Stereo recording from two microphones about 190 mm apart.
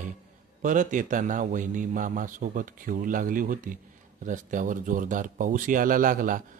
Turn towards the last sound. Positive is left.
turn(degrees=-45)  # may be behind; listen again after turning